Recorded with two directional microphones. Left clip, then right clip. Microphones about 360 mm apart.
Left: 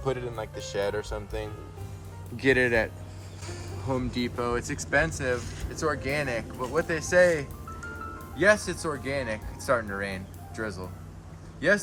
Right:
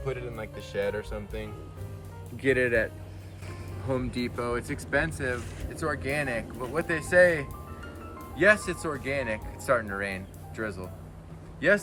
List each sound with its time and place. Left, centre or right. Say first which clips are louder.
0.0 s speech: left 4 dB; centre